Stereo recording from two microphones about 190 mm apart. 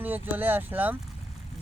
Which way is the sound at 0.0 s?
10° right (ahead or behind).